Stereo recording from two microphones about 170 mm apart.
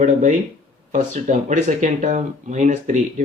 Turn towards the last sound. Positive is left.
turn(degrees=-45)  # may be behind; listen again after turning